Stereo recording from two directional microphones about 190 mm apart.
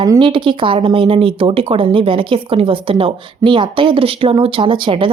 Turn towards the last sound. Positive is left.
turn(degrees=-25)  # may be behind; listen again after turning